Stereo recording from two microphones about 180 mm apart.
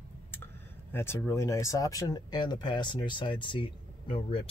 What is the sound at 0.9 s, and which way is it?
Speech, 15° left (ahead or behind).